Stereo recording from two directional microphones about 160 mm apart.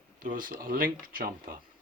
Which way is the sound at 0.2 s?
60° right (ahead or behind).